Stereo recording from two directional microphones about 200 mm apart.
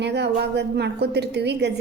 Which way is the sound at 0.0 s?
55° right (ahead or behind).